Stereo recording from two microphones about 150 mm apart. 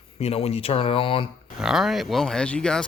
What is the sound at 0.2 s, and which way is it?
Speech, 45° left (ahead or behind).